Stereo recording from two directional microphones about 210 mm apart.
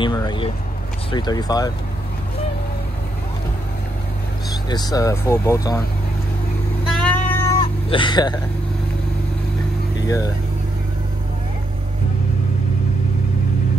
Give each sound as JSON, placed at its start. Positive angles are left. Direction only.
{"t": 0.0, "sound": "speech", "side_deg": 20}
{"t": 4.6, "sound": "speech", "side_deg": 20}
{"t": 6.9, "sound": "vehicle", "side_deg": 5}
{"t": 7.9, "sound": "speech", "side_deg": 20}
{"t": 10.0, "sound": "speech", "side_deg": 15}